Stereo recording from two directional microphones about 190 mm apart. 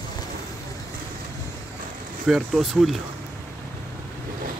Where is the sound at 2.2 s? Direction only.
Centre (ahead or behind).